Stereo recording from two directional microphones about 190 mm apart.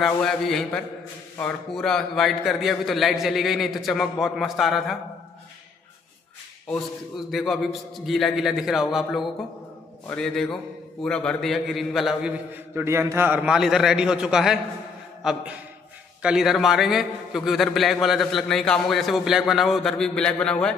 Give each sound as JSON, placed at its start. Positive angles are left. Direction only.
{"t": 0.0, "sound": "a man's voice", "side_deg": 0}
{"t": 6.7, "sound": "a man's voice", "side_deg": 0}